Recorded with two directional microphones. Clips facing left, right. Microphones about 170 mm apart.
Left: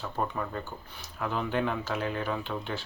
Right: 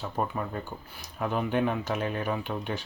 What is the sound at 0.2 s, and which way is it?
Speech, 15° right (ahead or behind).